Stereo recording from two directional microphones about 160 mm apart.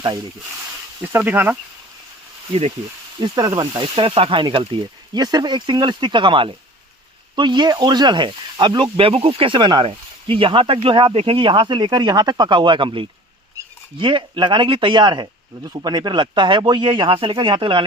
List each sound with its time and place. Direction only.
1.0 s speech: 10° right (ahead or behind)
2.5 s speech: 40° right (ahead or behind)
3.2 s speech: 25° right (ahead or behind)